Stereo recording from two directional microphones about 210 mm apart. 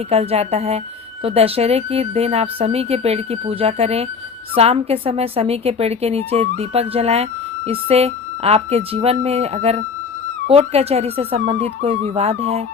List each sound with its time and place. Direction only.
0.1 s speech: 30° right (ahead or behind)